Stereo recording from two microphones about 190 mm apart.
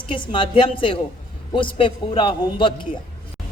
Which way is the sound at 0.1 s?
25° left (ahead or behind).